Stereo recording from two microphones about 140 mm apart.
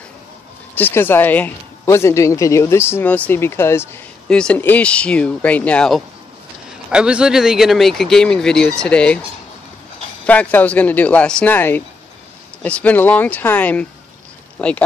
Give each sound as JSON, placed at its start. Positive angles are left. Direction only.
{"t": 0.7, "sound": "speech", "side_deg": 15}
{"t": 4.3, "sound": "speech", "side_deg": 5}
{"t": 6.9, "sound": "speech", "side_deg": -5}
{"t": 10.2, "sound": "speech", "side_deg": 10}